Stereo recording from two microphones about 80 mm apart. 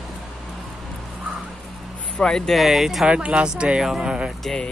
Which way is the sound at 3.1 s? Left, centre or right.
Centre.